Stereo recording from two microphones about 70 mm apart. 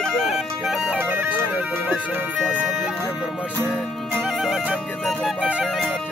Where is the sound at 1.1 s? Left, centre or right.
Right.